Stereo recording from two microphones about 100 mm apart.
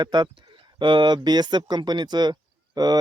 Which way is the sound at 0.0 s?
50° right (ahead or behind).